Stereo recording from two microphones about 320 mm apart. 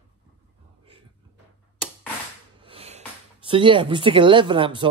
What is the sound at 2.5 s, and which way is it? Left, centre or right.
Speech, centre.